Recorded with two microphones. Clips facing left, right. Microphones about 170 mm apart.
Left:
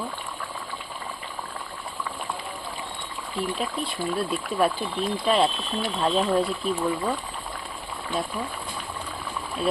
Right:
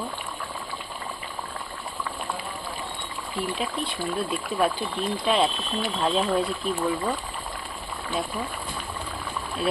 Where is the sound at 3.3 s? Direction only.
Centre (ahead or behind).